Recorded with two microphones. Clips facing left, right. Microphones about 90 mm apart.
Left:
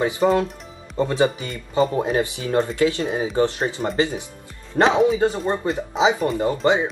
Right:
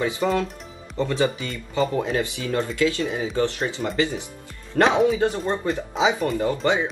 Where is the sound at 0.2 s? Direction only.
30° left (ahead or behind).